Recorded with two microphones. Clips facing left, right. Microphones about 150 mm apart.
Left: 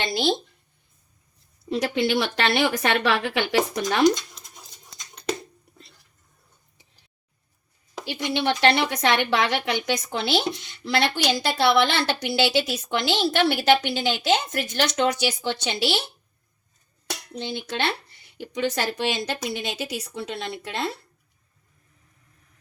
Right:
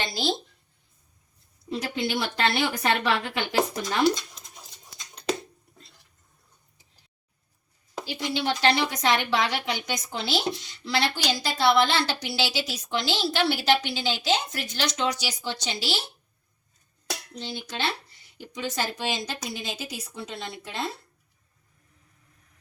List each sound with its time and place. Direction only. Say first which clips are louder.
0.1 s a sound: left 5 dB; 60° left (ahead or behind)
1.7 s a woman's voice: left 6 dB; 80° left
8.0 s a woman's voice: left 4 dB; 60° left (ahead or behind)
17.3 s a woman's voice: left 7 dB; 60° left (ahead or behind)